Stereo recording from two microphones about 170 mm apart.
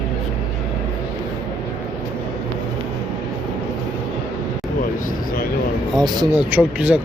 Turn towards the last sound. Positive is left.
turn(degrees=-10)  # may be behind; listen again after turning